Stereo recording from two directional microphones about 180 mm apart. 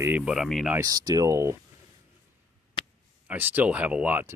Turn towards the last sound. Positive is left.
turn(degrees=-10)  # may be behind; listen again after turning